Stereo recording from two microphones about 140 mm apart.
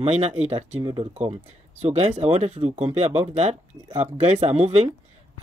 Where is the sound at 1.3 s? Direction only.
50° right (ahead or behind).